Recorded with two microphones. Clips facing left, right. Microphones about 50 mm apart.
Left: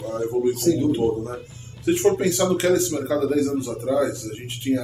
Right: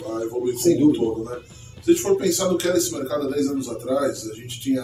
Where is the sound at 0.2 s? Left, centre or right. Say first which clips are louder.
Left 1 dB; left.